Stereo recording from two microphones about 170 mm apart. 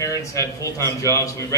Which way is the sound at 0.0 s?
20° left (ahead or behind).